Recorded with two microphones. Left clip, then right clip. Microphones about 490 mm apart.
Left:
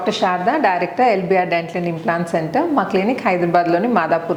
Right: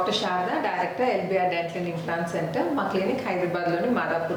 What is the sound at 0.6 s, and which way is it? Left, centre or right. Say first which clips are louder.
A woman's voice: left 10 dB; left.